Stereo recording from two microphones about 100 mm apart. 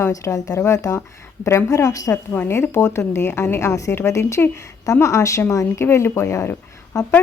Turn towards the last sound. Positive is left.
turn(degrees=35)  # may be behind; listen again after turning